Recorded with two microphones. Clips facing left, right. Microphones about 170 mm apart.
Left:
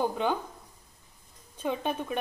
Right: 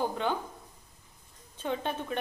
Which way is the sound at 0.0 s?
15° left (ahead or behind).